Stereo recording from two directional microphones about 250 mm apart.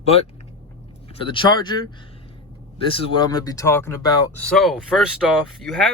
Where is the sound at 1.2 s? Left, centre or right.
Centre.